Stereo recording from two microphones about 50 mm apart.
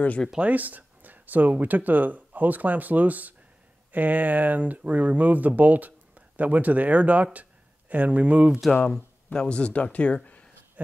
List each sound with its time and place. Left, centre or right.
0.4 s speech: right
8.9 s speech: centre